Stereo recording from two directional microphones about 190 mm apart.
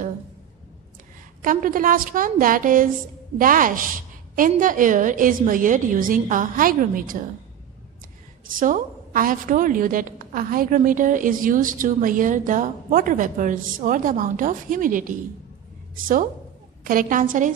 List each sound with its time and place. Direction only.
1.4 s a woman's voice: 45° right (ahead or behind)
8.5 s a woman's voice: 45° right (ahead or behind)
16.8 s a woman's voice: 45° right (ahead or behind)